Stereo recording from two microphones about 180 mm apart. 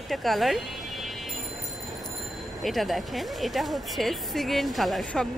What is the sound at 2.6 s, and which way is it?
Speech, centre (ahead or behind).